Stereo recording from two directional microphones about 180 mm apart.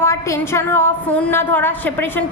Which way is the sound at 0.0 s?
15° left (ahead or behind).